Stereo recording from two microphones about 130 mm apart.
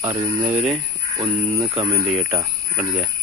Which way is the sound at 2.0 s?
5° right (ahead or behind).